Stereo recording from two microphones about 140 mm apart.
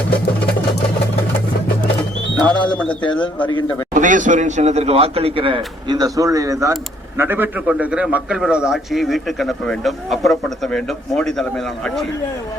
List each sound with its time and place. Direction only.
2.3 s speech: 5° left (ahead or behind)
3.9 s speech: 65° right (ahead or behind); by 6.0 s 35° right (ahead or behind)
6.0 s a man's voice: 25° right (ahead or behind); by 12.0 s centre (ahead or behind)